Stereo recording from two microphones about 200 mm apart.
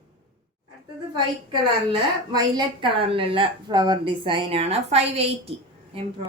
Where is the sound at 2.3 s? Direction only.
25° right (ahead or behind).